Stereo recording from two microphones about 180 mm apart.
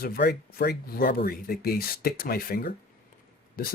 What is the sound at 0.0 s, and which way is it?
Speech, 60° left (ahead or behind).